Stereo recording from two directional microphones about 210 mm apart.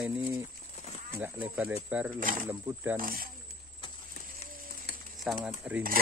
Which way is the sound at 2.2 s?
40° right (ahead or behind).